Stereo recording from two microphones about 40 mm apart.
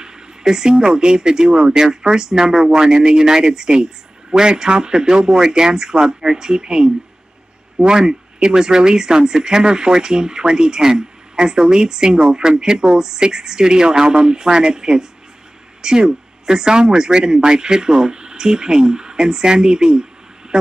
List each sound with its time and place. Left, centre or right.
0.0 s speech: centre